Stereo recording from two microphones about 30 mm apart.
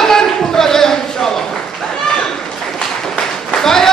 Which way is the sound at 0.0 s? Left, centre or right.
Centre.